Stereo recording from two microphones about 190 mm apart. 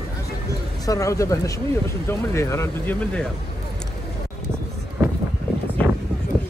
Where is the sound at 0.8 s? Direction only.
15° left (ahead or behind).